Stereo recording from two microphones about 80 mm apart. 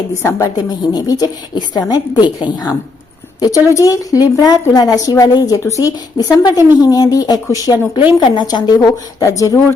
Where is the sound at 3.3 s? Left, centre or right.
Left.